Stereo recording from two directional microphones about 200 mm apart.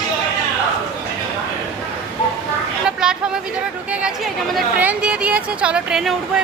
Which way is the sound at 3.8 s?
5° right (ahead or behind).